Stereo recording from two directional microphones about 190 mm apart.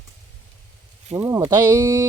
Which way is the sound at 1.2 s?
15° right (ahead or behind).